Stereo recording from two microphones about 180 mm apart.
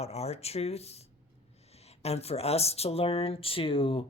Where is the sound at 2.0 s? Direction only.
35° left (ahead or behind).